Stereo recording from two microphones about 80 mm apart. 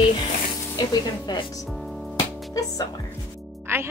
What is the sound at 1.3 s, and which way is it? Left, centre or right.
Speech, left.